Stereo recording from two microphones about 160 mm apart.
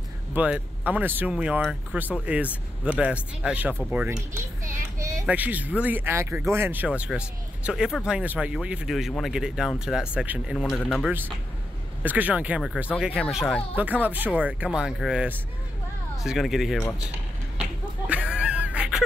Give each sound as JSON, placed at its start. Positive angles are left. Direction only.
{"t": 0.3, "sound": "speech", "side_deg": -10}
{"t": 4.9, "sound": "children playing", "side_deg": -20}
{"t": 5.2, "sound": "speech", "side_deg": -10}
{"t": 17.6, "sound": "a sound", "side_deg": -10}